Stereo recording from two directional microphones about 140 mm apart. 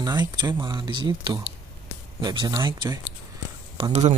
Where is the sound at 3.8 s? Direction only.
55° right (ahead or behind).